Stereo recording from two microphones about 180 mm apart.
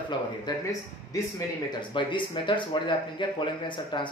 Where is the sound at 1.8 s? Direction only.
25° left (ahead or behind).